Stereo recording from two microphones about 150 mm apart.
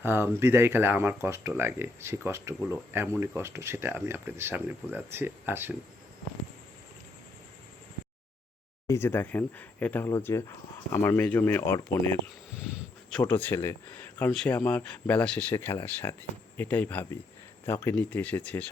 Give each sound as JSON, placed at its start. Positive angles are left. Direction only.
{"t": 0.0, "sound": "speech", "side_deg": -15}
{"t": 8.9, "sound": "speech", "side_deg": 15}
{"t": 13.1, "sound": "speech", "side_deg": 5}